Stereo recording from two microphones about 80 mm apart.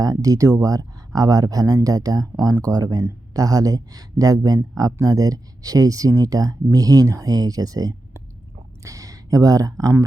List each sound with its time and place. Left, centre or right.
0.0 s speech: right